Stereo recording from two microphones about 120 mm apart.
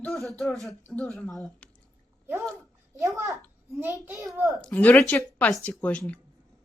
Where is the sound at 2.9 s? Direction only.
25° right (ahead or behind).